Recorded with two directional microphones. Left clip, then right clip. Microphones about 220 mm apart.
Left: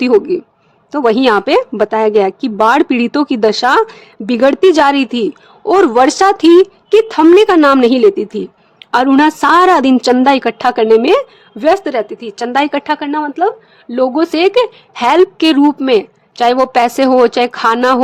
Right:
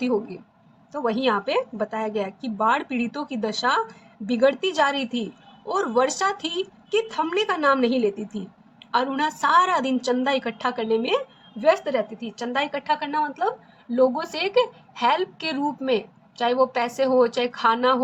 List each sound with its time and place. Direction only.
0.0 s speech: 55° left (ahead or behind)